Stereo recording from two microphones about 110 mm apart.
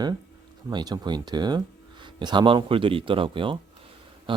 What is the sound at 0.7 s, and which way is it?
Speech, 40° right (ahead or behind).